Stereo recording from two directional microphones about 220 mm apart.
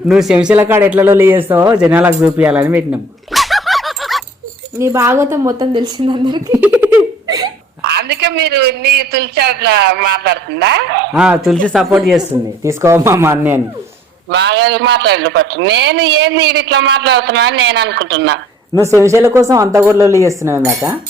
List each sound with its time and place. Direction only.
0.1 s speech: centre (ahead or behind)
4.8 s speech: 15° right (ahead or behind)
6.6 s giggle: 5° right (ahead or behind)
7.9 s a sound: 50° right (ahead or behind)
8.9 s a man's voice: 45° right (ahead or behind)
11.1 s speech: 5° right (ahead or behind)
14.3 s a man's voice: 50° right (ahead or behind)
18.7 s speech: 15° right (ahead or behind)